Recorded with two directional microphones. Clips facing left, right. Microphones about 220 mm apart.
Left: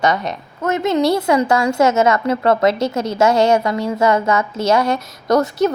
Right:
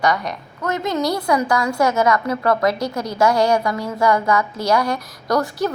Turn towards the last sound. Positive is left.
turn(degrees=25)  # may be behind; listen again after turning